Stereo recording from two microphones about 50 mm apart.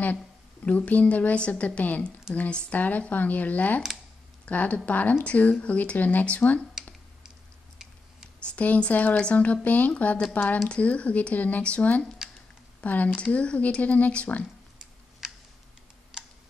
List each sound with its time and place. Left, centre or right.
0.7 s a woman's voice: left
2.8 s a woman's voice: left
8.5 s a woman's voice: left
12.2 s a sound: centre
12.8 s a woman's voice: left
15.2 s computer keyboard: centre